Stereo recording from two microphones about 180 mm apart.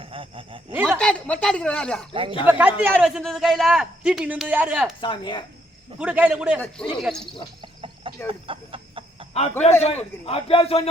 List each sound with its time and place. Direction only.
0.0 s speech: 30° right (ahead or behind)
0.9 s a man's voice: 5° left (ahead or behind)
2.4 s a man's voice: 10° right (ahead or behind)
4.9 s speech: 25° left (ahead or behind)
6.0 s a man's voice: 5° right (ahead or behind)
7.6 s chicken: 25° right (ahead or behind)
9.3 s a man's voice: 35° left (ahead or behind)